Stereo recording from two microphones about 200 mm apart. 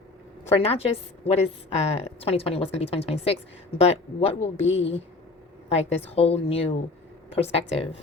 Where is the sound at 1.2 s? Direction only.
30° left (ahead or behind).